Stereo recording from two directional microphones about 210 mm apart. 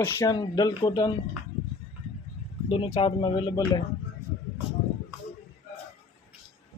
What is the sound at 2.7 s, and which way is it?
Speech, 25° left (ahead or behind).